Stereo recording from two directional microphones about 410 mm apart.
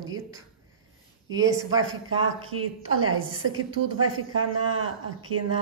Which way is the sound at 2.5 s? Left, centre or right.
Right.